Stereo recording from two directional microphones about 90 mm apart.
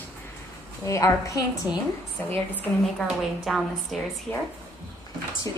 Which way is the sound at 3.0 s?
5° right (ahead or behind).